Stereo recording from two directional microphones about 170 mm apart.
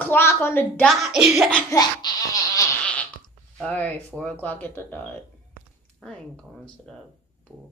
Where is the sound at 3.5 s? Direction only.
5° left (ahead or behind).